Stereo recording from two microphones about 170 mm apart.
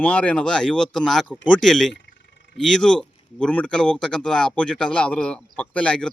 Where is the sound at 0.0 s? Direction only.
10° left (ahead or behind).